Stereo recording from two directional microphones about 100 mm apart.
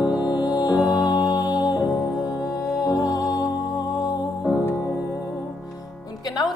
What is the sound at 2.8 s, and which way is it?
Music, 40° left (ahead or behind).